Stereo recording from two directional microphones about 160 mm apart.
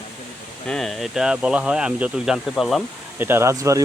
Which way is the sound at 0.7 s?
Centre (ahead or behind).